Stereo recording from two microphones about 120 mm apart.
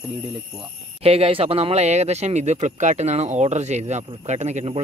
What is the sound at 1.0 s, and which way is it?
Speech, 55° right (ahead or behind).